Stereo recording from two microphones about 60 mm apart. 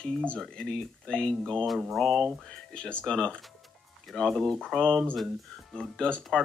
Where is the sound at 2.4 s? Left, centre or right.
Centre.